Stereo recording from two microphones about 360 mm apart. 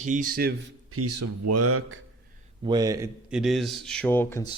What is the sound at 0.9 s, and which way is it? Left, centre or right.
Speech, right.